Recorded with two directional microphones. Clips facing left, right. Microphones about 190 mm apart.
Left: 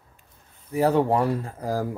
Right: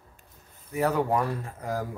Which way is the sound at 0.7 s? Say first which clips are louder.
Left 5 dB; 30° left (ahead or behind).